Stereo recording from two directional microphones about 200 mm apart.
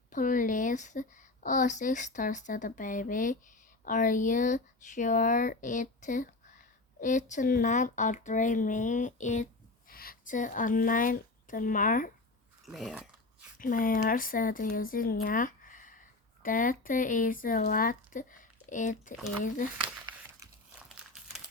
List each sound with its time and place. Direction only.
0.1 s a woman's voice: 40° left (ahead or behind)
12.6 s speech: centre (ahead or behind)
13.6 s speech: 45° left (ahead or behind)